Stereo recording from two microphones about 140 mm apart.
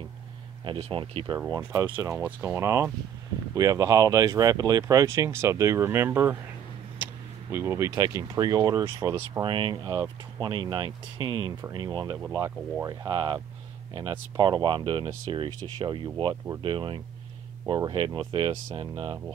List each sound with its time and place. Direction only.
0.7 s speech: 45° right (ahead or behind)
2.0 s speech: 15° right (ahead or behind)
7.5 s speech: 20° right (ahead or behind)
9.4 s speech: 35° right (ahead or behind)
13.1 s speech: 35° right (ahead or behind)